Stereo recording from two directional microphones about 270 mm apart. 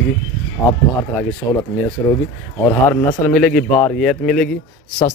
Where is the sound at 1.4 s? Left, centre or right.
Centre.